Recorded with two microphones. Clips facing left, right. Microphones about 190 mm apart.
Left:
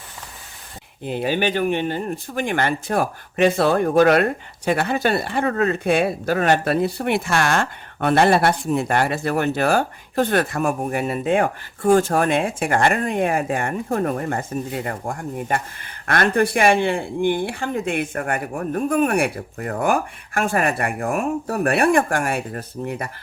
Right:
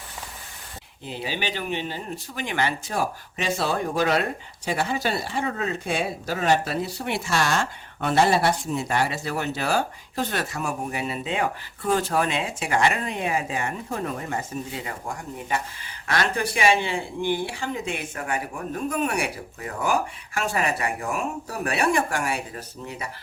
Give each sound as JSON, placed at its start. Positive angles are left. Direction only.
{"t": 1.0, "sound": "speech", "side_deg": 55}